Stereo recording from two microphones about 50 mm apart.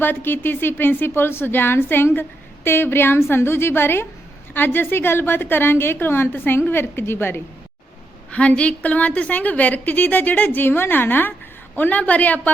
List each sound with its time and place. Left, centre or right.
0.0 s speech: left
8.3 s a woman's voice: left